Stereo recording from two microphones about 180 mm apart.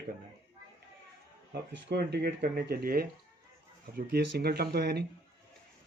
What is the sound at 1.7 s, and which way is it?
Speech, 70° right (ahead or behind).